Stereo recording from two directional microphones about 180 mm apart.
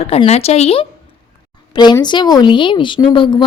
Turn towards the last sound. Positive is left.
turn(degrees=25)  # may be behind; listen again after turning